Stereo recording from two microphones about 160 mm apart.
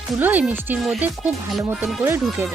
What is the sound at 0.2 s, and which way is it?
Speech, 10° right (ahead or behind).